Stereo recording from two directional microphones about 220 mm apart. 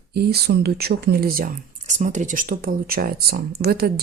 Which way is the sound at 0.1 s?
45° right (ahead or behind).